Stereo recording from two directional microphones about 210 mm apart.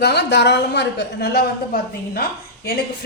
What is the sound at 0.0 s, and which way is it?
A woman's voice, 55° left (ahead or behind).